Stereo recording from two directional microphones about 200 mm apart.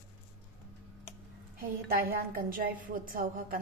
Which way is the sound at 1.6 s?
45° right (ahead or behind).